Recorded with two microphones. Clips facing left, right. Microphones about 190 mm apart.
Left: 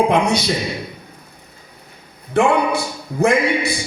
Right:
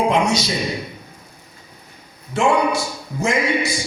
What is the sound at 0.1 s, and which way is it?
Speech, 60° left (ahead or behind).